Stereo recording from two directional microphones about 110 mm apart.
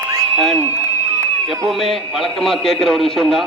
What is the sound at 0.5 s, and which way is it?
Speech, 20° left (ahead or behind).